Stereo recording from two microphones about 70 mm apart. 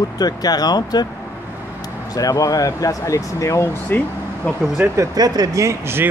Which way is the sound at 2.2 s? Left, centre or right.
Left.